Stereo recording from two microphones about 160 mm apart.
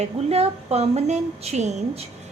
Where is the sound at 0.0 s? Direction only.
40° right (ahead or behind).